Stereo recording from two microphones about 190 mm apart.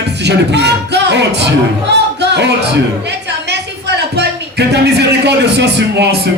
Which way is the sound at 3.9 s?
60° right (ahead or behind).